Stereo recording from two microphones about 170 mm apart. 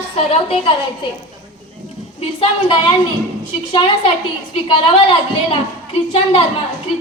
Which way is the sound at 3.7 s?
30° left (ahead or behind).